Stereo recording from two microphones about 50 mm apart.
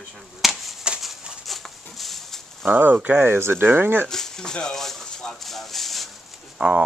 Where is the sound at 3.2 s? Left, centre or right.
Right.